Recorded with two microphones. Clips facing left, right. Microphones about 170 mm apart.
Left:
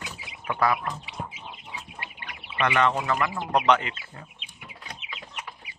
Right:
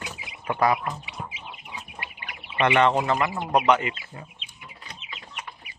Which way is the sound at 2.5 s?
25° right (ahead or behind).